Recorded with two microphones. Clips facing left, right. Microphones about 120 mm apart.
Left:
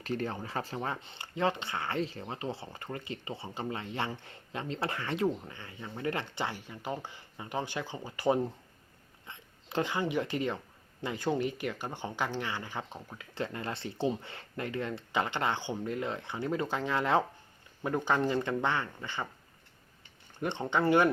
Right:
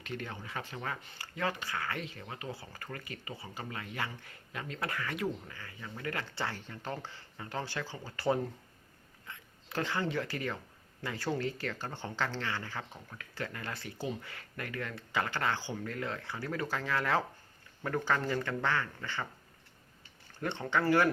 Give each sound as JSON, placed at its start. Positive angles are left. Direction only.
{"t": 0.0, "sound": "speech", "side_deg": 35}
{"t": 20.4, "sound": "speech", "side_deg": 20}